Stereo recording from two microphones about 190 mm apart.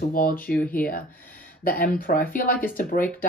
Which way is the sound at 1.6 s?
50° left (ahead or behind).